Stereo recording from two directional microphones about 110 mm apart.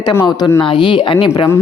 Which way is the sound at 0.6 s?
50° left (ahead or behind).